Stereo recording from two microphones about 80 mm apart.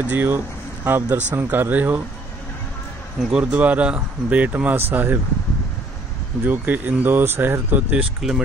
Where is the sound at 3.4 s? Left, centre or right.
Centre.